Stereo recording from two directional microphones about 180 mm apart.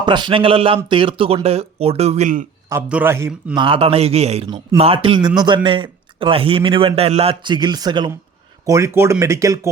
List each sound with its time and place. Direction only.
0.0 s a man's voice: 25° right (ahead or behind); by 2.5 s 45° right (ahead or behind)
2.6 s a man's voice: 10° right (ahead or behind)
3.6 s speech: 30° right (ahead or behind)
4.4 s a man's voice: 20° right (ahead or behind)